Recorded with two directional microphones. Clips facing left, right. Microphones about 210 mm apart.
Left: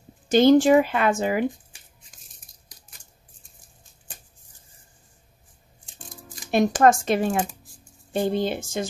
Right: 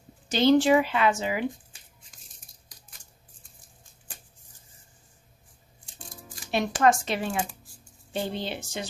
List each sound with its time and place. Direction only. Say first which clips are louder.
0.3 s speech: left 5 dB; 50° left (ahead or behind)
6.5 s speech: left 5 dB; 45° left (ahead or behind)